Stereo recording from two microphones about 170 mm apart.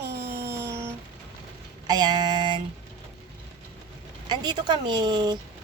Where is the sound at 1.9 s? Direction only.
25° right (ahead or behind).